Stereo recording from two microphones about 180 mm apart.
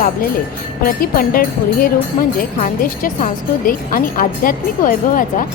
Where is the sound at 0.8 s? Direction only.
55° left (ahead or behind).